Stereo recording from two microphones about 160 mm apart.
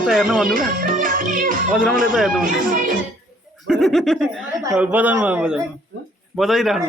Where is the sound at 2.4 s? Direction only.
60° right (ahead or behind).